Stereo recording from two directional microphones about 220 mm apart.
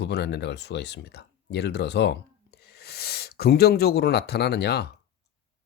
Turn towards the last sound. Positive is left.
turn(degrees=50)  # may be behind; listen again after turning